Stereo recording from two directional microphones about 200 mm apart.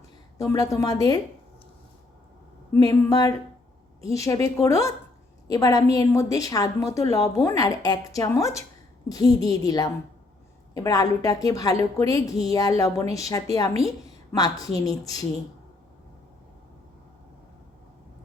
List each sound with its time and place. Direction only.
0.4 s a woman's voice: 15° left (ahead or behind)
2.7 s a woman's voice: 15° left (ahead or behind)